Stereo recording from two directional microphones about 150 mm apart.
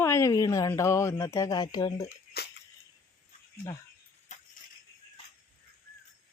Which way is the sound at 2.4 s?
90° left.